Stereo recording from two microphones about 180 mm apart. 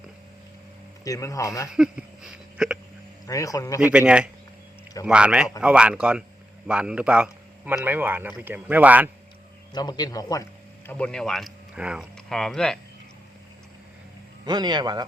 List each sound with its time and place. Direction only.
1.0 s speech: 20° left (ahead or behind)
1.7 s a sound: 5° right (ahead or behind)
3.2 s speech: 20° left (ahead or behind)
3.8 s a man's voice: 5° right (ahead or behind)
9.7 s speech: 20° left (ahead or behind)
10.8 s speech: 5° left (ahead or behind)
14.4 s a man's voice: 25° right (ahead or behind)